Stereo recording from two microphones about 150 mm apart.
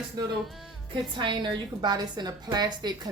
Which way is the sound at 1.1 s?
30° right (ahead or behind).